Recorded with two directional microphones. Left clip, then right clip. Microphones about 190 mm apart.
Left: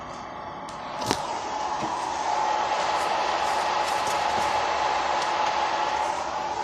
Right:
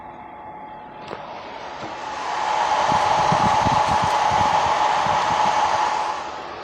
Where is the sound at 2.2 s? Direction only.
30° right (ahead or behind).